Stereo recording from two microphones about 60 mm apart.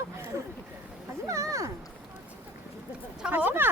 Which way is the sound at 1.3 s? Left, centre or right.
Right.